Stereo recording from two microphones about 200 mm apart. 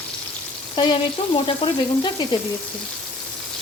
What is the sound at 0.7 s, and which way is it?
Frying, 25° left (ahead or behind).